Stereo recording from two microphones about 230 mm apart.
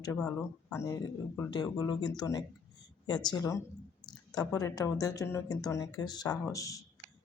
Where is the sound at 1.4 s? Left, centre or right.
Centre.